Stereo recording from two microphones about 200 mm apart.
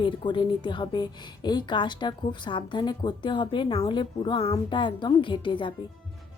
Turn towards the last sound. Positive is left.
turn(degrees=25)  # may be behind; listen again after turning